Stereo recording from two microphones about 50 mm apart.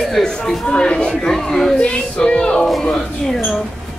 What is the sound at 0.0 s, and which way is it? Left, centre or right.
Speech, centre.